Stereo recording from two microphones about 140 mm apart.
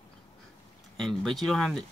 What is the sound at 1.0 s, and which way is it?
Speech, centre (ahead or behind).